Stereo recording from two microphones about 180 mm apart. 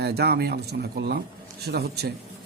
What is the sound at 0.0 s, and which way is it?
Speech, 65° right (ahead or behind).